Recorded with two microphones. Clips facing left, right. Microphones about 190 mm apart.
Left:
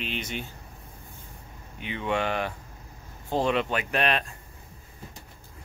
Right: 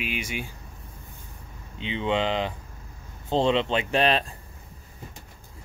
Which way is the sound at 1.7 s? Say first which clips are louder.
Right 3 dB; 20° right (ahead or behind).